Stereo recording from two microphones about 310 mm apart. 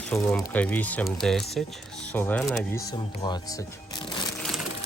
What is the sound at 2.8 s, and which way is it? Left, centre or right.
Speech, centre.